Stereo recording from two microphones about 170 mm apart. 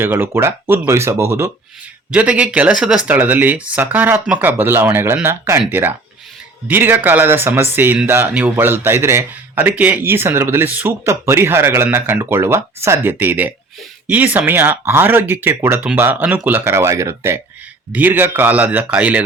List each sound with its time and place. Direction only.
0.0 s speech: 10° right (ahead or behind)